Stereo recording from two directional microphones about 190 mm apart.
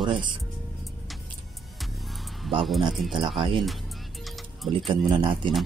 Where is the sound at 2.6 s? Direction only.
Centre (ahead or behind).